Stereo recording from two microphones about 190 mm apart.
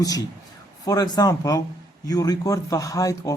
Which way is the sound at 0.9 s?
20° left (ahead or behind).